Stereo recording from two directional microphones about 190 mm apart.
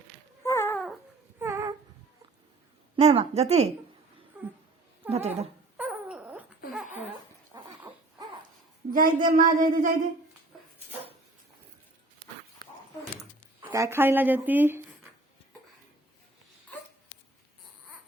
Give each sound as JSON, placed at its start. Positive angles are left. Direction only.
{"t": 0.4, "sound": "cat", "side_deg": 15}
{"t": 1.4, "sound": "a sound", "side_deg": -15}
{"t": 2.9, "sound": "a woman's voice", "side_deg": -30}
{"t": 5.0, "sound": "a woman's voice", "side_deg": -35}
{"t": 5.7, "sound": "a sound", "side_deg": -5}
{"t": 6.8, "sound": "a sound", "side_deg": 40}
{"t": 7.5, "sound": "dog", "side_deg": -20}
{"t": 8.9, "sound": "a child's voice", "side_deg": -45}
{"t": 13.6, "sound": "speech", "side_deg": -15}